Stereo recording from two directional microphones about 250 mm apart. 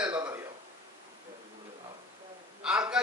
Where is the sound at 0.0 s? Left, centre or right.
Centre.